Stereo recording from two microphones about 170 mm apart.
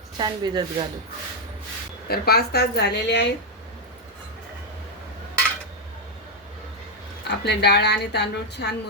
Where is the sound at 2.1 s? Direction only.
65° left (ahead or behind); by 3.3 s 85° left.